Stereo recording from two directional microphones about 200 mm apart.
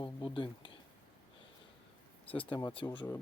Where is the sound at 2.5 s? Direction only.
25° left (ahead or behind).